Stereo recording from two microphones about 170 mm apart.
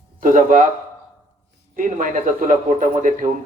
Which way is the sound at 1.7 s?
50° right (ahead or behind).